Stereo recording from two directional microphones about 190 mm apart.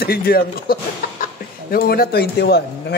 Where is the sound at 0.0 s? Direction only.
55° left (ahead or behind).